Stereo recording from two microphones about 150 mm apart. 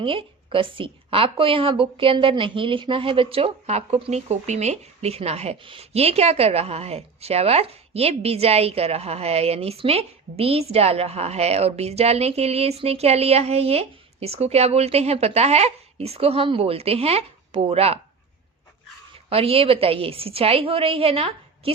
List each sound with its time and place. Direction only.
0.0 s a woman's voice: 35° right (ahead or behind)
19.3 s a woman's voice: 40° right (ahead or behind)